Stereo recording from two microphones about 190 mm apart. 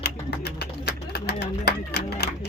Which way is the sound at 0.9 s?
60° left (ahead or behind).